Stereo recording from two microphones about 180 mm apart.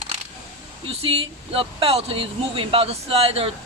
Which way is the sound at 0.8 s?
35° right (ahead or behind).